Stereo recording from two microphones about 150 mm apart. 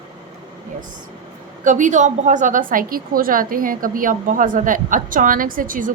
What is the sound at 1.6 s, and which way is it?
A woman's voice, 55° right (ahead or behind).